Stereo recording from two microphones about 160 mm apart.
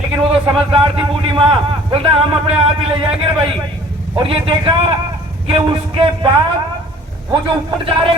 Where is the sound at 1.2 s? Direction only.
30° right (ahead or behind).